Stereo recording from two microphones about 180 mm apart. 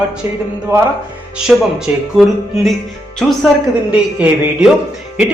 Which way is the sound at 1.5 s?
5° right (ahead or behind).